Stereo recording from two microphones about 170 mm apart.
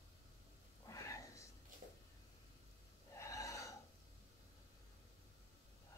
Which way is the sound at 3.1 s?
20° left (ahead or behind).